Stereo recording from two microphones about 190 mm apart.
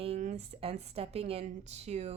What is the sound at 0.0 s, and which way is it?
A woman's voice, 35° right (ahead or behind).